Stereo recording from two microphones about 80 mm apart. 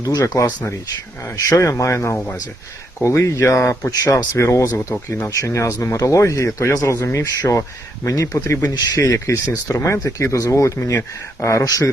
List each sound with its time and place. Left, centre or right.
0.0 s speech: left